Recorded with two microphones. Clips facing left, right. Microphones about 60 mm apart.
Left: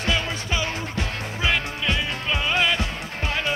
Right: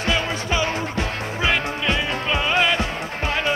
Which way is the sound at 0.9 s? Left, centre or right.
Right.